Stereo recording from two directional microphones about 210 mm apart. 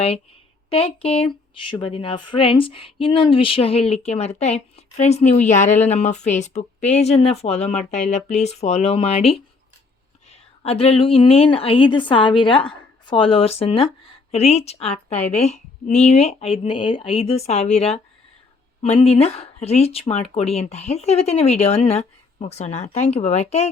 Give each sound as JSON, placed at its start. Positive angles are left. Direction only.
{"t": 0.7, "sound": "a woman's voice", "side_deg": 25}